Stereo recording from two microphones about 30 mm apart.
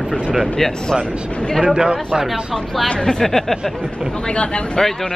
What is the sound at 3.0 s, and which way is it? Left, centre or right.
Speech, left.